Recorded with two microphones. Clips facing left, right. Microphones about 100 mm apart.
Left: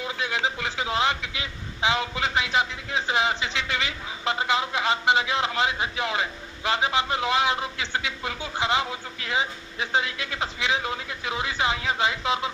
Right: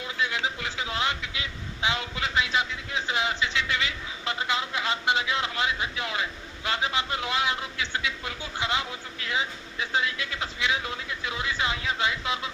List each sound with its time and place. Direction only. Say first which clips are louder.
0.3 s a man's voice: left 3 dB; 20° left (ahead or behind)